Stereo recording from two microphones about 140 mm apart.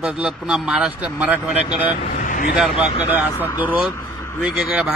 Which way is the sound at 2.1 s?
65° left (ahead or behind).